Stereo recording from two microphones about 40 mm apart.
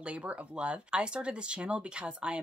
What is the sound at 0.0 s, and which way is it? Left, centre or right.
Speech, right.